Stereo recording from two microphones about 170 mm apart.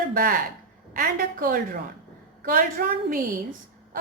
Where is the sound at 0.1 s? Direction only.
55° right (ahead or behind).